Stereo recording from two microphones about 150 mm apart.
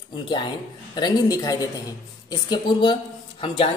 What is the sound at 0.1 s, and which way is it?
A woman's voice, 30° left (ahead or behind).